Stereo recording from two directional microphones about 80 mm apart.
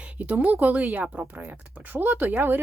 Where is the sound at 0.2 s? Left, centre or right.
Centre.